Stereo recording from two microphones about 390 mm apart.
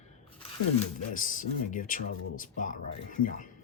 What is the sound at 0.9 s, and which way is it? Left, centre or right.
Speech, centre.